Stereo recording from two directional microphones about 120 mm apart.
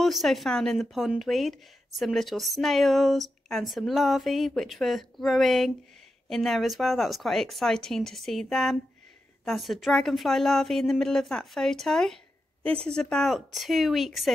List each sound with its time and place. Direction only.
0.0 s speech: centre (ahead or behind)